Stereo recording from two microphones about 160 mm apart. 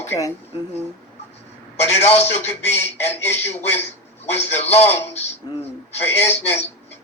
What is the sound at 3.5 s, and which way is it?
Speech, 45° left (ahead or behind).